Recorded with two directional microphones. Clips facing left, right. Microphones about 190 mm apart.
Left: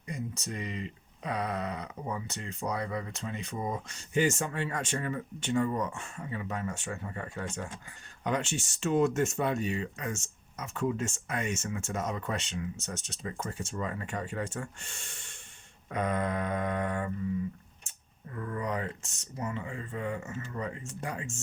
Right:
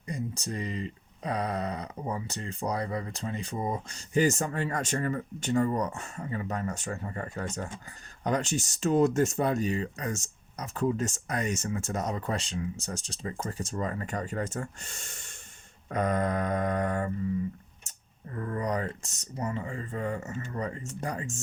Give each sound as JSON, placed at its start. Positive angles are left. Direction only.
{"t": 0.1, "sound": "speech", "side_deg": -35}
{"t": 15.9, "sound": "a sound", "side_deg": -45}
{"t": 18.3, "sound": "speech", "side_deg": -40}